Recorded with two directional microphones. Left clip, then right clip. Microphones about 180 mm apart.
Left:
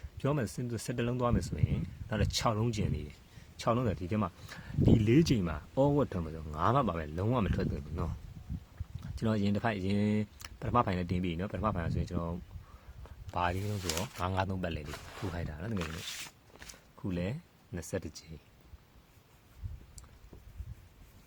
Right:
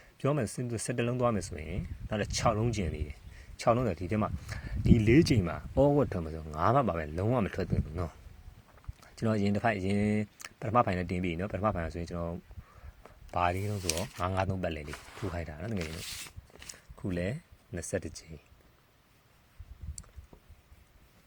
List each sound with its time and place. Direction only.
0.2 s speech: 15° right (ahead or behind)
9.1 s speech: 15° right (ahead or behind)
13.0 s a sound: 15° right (ahead or behind)
14.2 s speech: 10° right (ahead or behind)
17.0 s speech: 15° right (ahead or behind)